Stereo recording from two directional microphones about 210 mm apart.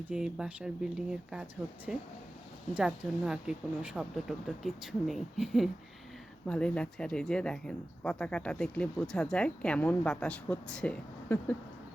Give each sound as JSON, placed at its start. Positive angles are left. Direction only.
{"t": 0.0, "sound": "speech", "side_deg": -5}